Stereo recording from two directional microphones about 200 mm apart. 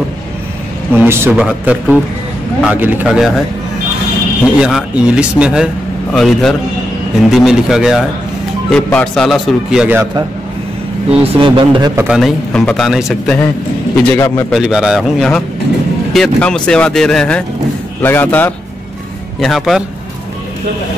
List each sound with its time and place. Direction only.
0.9 s a man's voice: 10° right (ahead or behind)
4.6 s a man's voice: 5° right (ahead or behind)
11.1 s a man's voice: 25° right (ahead or behind)
12.0 s a man's voice: centre (ahead or behind)
14.0 s a man's voice: 10° left (ahead or behind)
14.5 s a man's voice: centre (ahead or behind)